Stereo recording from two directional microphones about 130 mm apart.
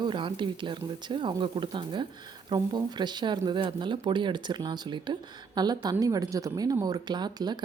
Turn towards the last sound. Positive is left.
turn(degrees=-35)  # may be behind; listen again after turning